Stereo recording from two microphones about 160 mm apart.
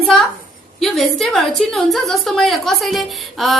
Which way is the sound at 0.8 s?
Centre (ahead or behind).